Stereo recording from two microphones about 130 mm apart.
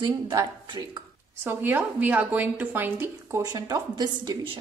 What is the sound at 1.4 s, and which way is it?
A woman's voice, 15° right (ahead or behind).